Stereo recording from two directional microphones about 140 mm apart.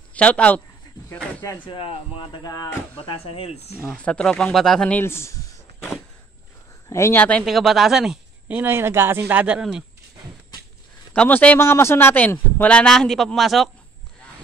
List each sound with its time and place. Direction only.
0.1 s a man's voice: 10° left (ahead or behind)
1.7 s speech: 40° left (ahead or behind)
3.0 s speech: 45° left (ahead or behind)
3.8 s speech: 5° left (ahead or behind)
6.9 s a man's voice: 20° left (ahead or behind)
7.4 s speech: centre (ahead or behind)
11.1 s a man's voice: 10° left (ahead or behind)